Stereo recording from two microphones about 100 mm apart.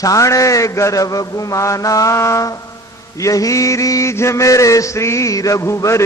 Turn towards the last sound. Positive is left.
turn(degrees=30)  # may be behind; listen again after turning